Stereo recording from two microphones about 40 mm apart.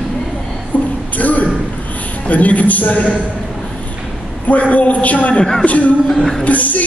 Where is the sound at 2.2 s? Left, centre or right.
Left.